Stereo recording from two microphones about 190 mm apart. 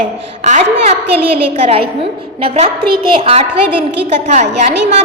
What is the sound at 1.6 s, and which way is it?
A woman's voice, 30° right (ahead or behind).